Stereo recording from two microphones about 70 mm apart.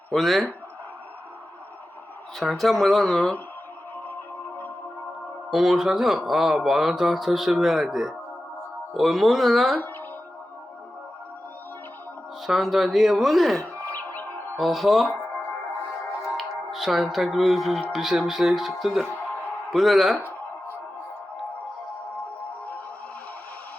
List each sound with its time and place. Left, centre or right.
0.1 s speech: centre
2.4 s speech: centre
3.9 s music: left
5.5 s speech: centre
12.5 s speech: centre
13.9 s music: left
14.5 s speech: centre
16.7 s speech: centre